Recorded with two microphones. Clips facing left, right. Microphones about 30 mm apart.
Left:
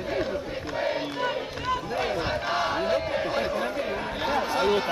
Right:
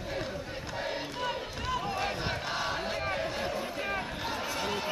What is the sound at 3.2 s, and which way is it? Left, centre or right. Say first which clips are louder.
Chatter: left 7 dB; left.